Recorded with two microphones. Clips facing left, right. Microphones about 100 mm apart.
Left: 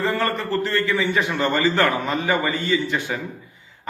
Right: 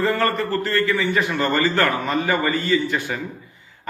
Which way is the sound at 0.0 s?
15° left (ahead or behind).